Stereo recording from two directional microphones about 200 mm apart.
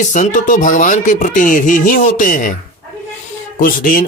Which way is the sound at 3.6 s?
45° left (ahead or behind).